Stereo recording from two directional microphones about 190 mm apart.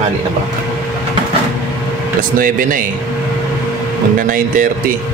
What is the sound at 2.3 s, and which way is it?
Speech, 45° right (ahead or behind).